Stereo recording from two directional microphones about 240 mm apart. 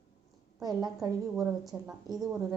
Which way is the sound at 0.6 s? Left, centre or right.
Centre.